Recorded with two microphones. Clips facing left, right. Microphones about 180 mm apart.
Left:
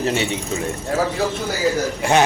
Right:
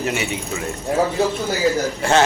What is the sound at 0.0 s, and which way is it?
Speech, 30° left (ahead or behind).